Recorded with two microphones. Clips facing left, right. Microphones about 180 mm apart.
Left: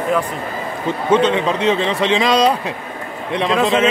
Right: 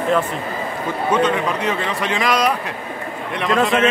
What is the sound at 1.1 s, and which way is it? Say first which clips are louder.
A man's voice: left 4 dB; 25° left (ahead or behind).